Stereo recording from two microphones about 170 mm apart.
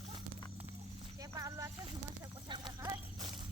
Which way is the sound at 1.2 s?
20° right (ahead or behind).